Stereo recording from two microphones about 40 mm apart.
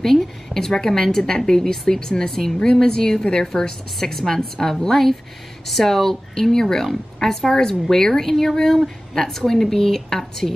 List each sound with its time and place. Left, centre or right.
0.0 s a woman's voice: centre
4.0 s a woman's voice: centre